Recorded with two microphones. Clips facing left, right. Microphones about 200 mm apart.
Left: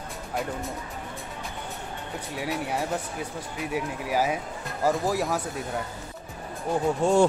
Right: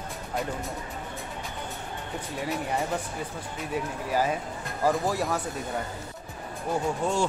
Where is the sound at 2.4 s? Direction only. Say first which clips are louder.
Even; 5° left (ahead or behind).